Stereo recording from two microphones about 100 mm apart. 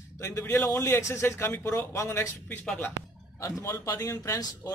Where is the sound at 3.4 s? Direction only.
30° left (ahead or behind).